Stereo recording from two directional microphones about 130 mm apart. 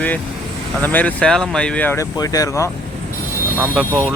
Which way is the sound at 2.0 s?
30° left (ahead or behind).